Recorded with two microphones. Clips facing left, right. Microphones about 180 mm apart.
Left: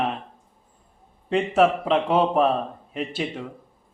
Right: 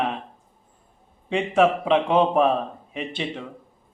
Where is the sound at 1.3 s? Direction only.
Centre (ahead or behind).